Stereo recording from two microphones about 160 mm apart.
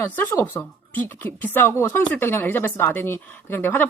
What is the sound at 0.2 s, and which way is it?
Speech, 15° left (ahead or behind).